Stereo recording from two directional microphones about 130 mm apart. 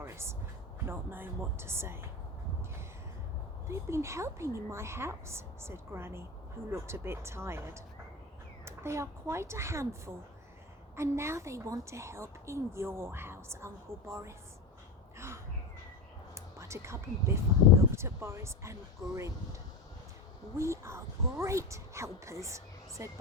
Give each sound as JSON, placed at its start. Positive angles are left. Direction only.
{"t": 0.0, "sound": "a woman's voice", "side_deg": -20}
{"t": 3.7, "sound": "a woman's voice", "side_deg": -20}
{"t": 16.3, "sound": "whispering", "side_deg": -20}
{"t": 17.9, "sound": "a woman's voice", "side_deg": -20}
{"t": 20.6, "sound": "a woman's voice", "side_deg": -20}